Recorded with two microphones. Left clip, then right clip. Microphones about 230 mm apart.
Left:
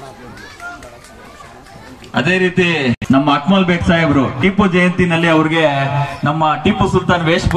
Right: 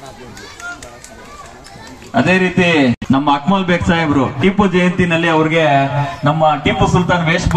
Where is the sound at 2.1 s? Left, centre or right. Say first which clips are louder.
Right 1 dB; left.